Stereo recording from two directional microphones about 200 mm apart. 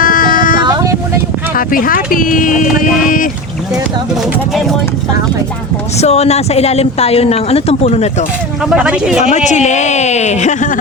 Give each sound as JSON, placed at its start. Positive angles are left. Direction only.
{"t": 0.0, "sound": "a sound", "side_deg": 45}
{"t": 0.6, "sound": "vehicle", "side_deg": -20}
{"t": 1.5, "sound": "speech", "side_deg": 45}
{"t": 6.0, "sound": "speech", "side_deg": 30}
{"t": 8.7, "sound": "speech", "side_deg": -5}
{"t": 9.3, "sound": "speech", "side_deg": 35}